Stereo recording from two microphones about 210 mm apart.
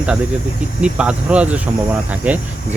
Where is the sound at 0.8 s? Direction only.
5° right (ahead or behind).